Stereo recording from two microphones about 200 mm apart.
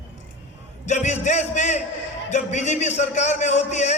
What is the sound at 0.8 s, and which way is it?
A man's voice, 35° left (ahead or behind).